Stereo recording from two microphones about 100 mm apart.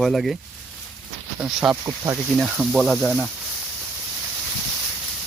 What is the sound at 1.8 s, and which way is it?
Speech, 30° right (ahead or behind).